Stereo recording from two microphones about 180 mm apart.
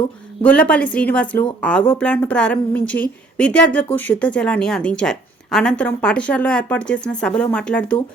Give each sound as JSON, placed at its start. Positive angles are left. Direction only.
{"t": 0.4, "sound": "a woman's voice", "side_deg": 5}